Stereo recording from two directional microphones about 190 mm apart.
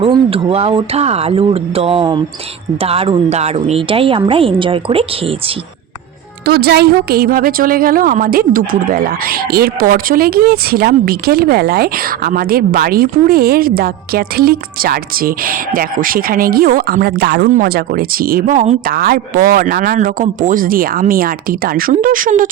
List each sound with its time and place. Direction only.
0.0 s a woman's voice: 30° right (ahead or behind)
6.4 s a woman's voice: 55° right (ahead or behind); by 18.8 s 40° right (ahead or behind)
18.9 s a woman's voice: 50° right (ahead or behind)